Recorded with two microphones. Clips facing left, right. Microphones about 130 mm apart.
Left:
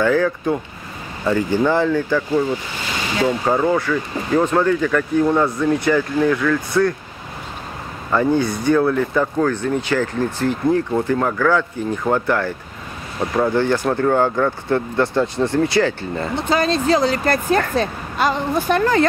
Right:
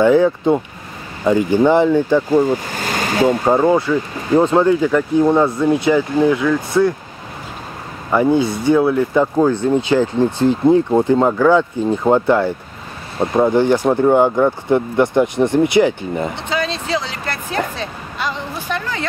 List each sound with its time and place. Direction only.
0.0 s speech: 20° right (ahead or behind)
2.3 s speech: 45° right (ahead or behind)
3.4 s speech: 25° right (ahead or behind)
8.1 s speech: 15° right (ahead or behind)
16.3 s speech: 45° left (ahead or behind)